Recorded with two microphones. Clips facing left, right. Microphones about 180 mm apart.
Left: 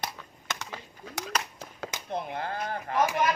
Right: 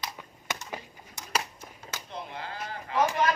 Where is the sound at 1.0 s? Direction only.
90° left.